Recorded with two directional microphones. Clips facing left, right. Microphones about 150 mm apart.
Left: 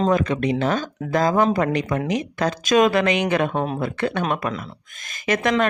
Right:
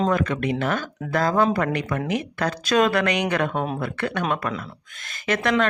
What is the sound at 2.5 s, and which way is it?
Speech, 15° left (ahead or behind).